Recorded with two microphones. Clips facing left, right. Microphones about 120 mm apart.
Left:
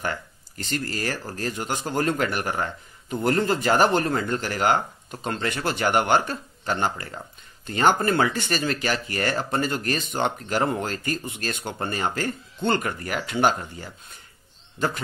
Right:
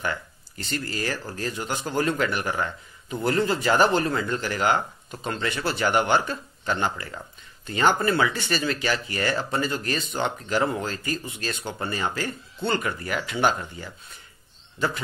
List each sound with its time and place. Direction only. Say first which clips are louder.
0.0 s speech: even; 45° left (ahead or behind)